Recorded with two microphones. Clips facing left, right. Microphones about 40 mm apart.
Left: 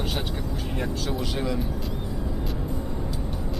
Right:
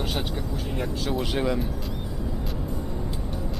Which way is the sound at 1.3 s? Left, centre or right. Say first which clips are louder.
Right 4 dB; centre.